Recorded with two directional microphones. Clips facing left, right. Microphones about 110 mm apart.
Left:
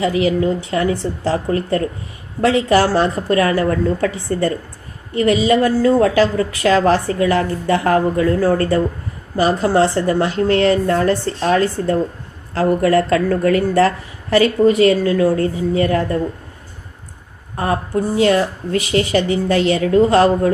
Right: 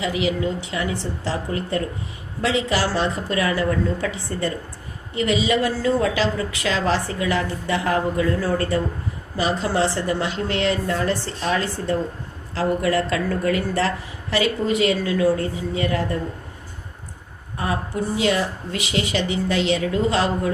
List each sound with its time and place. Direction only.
0.0 s a woman's voice: 45° left (ahead or behind)
17.6 s a woman's voice: 45° left (ahead or behind)